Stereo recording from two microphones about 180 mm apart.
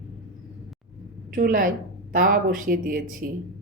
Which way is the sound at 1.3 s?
50° right (ahead or behind).